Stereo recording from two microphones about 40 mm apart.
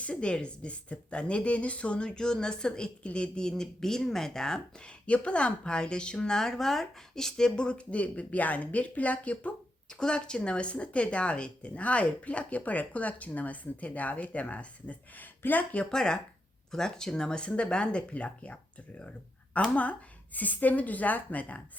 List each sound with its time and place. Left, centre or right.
0.0 s speech: left
3.4 s speech: centre
4.8 s speech: left
9.9 s speech: left
15.9 s speech: centre
19.7 s a woman's voice: left